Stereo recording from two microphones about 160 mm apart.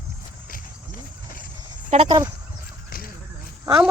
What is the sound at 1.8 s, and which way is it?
Speech, 40° right (ahead or behind).